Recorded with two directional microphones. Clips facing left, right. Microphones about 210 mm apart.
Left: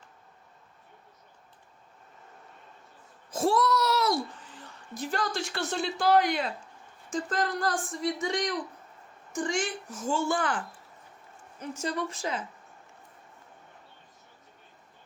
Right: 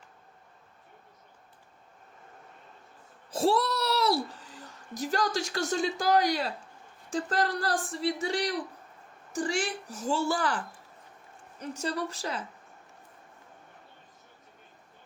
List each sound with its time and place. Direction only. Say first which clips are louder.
3.3 s a sound: left 1 dB; 30° right (ahead or behind)
7.1 s speech: right 1 dB; 35° right (ahead or behind)
11.6 s speech: even; 35° right (ahead or behind)